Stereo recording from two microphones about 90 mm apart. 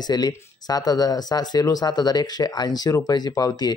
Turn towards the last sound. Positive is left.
turn(degrees=45)  # may be behind; listen again after turning